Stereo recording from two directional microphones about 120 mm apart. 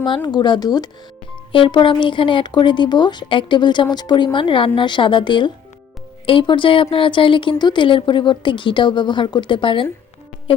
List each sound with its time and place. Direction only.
0.3 s speech: 40° left (ahead or behind)
1.5 s speech: 45° left (ahead or behind)